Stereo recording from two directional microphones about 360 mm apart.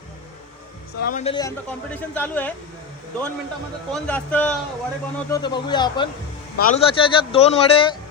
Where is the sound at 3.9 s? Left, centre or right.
Centre.